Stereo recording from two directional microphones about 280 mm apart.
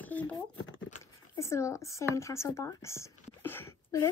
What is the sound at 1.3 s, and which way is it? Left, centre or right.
Speech, centre.